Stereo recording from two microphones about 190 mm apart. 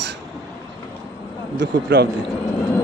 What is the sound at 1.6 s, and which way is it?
Speech, 60° right (ahead or behind).